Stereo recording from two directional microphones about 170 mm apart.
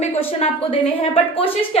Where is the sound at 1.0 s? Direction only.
30° left (ahead or behind).